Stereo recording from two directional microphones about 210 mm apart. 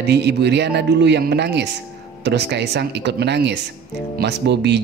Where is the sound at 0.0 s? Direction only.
50° right (ahead or behind).